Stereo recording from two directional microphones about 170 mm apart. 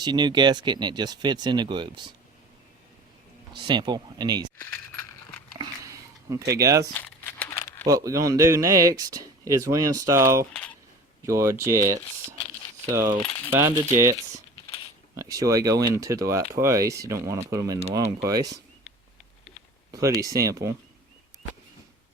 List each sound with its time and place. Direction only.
0.0 s speech: 25° right (ahead or behind)
3.6 s speech: 25° right (ahead or behind)
5.5 s biting: 20° right (ahead or behind)
6.9 s crumpling: 10° left (ahead or behind)
7.9 s speech: 20° right (ahead or behind)
19.9 s speech: 20° right (ahead or behind)